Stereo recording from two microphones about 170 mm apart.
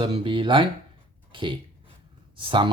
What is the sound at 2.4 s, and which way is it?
Speech, 30° right (ahead or behind).